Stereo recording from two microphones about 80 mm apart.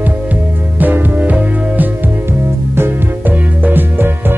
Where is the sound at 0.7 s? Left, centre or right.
Right.